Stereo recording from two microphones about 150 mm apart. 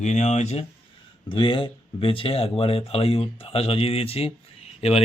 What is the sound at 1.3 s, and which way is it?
Speech, 35° left (ahead or behind).